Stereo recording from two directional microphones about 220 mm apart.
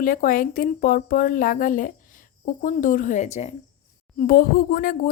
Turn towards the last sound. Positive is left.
turn(degrees=40)  # may be behind; listen again after turning